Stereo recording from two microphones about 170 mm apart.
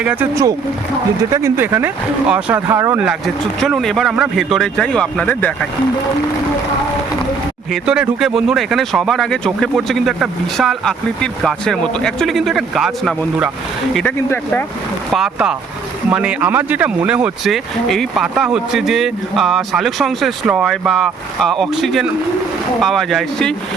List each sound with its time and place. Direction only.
0.0 s speech: 10° right (ahead or behind)
3.6 s speech: centre (ahead or behind)
7.7 s speech: 5° right (ahead or behind)
13.9 s speech: 10° left (ahead or behind)
15.1 s speech: 5° right (ahead or behind)